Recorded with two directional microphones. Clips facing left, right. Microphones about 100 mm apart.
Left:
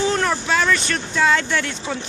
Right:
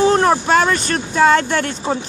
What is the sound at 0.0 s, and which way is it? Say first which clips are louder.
Speech: right 7 dB; 40° right (ahead or behind).